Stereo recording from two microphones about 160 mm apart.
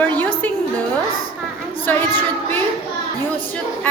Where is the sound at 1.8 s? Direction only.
10° left (ahead or behind).